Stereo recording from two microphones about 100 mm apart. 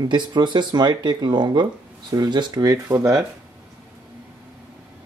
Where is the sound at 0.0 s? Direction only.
50° right (ahead or behind).